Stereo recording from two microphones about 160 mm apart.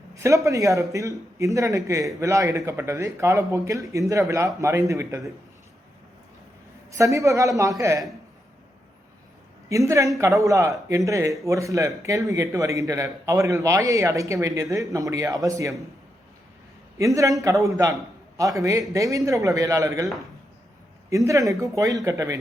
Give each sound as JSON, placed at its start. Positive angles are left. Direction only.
{"t": 0.1, "sound": "a man's voice", "side_deg": -20}
{"t": 6.9, "sound": "a man's voice", "side_deg": -20}
{"t": 9.6, "sound": "a man's voice", "side_deg": -20}
{"t": 17.0, "sound": "a man's voice", "side_deg": -20}
{"t": 21.2, "sound": "a man's voice", "side_deg": -20}